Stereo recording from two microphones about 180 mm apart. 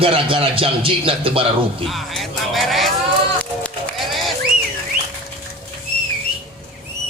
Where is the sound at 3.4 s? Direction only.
5° left (ahead or behind).